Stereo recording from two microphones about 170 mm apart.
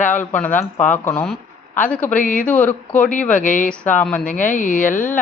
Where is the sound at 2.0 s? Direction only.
55° left (ahead or behind).